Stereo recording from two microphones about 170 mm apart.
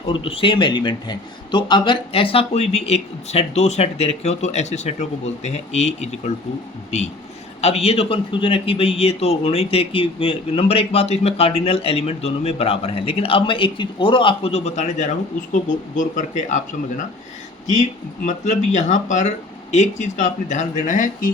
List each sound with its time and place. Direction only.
0.1 s a man's voice: 30° left (ahead or behind)
18.3 s speech: 45° left (ahead or behind)